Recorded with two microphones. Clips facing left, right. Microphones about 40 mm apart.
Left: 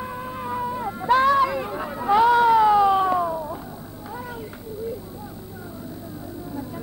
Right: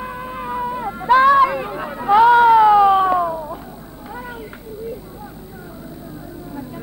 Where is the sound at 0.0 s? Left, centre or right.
Right.